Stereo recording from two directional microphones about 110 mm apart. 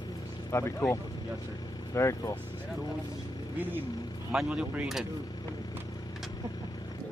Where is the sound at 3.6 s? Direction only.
15° right (ahead or behind).